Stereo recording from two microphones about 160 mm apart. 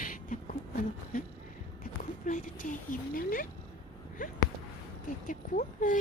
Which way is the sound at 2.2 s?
55° left (ahead or behind).